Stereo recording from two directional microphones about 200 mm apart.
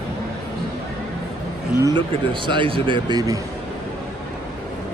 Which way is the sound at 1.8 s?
25° right (ahead or behind).